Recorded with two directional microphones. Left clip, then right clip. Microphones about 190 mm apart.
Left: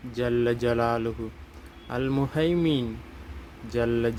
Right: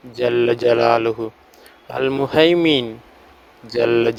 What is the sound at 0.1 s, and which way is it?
Speech, 45° right (ahead or behind).